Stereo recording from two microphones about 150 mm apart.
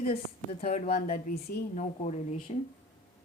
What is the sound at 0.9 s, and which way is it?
Speech, 80° left.